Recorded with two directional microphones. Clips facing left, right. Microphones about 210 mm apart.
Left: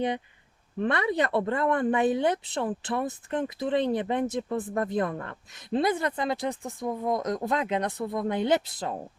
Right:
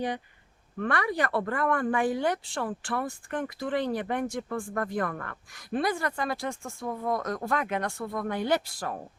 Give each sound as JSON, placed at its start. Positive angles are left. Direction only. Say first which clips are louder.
{"t": 0.8, "sound": "a woman's voice", "louder": "left 3 dB", "side_deg": 20}